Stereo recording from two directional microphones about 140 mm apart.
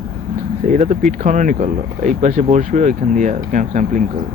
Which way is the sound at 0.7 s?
65° right (ahead or behind).